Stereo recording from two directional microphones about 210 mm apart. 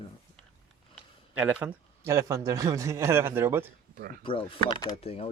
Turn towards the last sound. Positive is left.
turn(degrees=30)  # may be behind; listen again after turning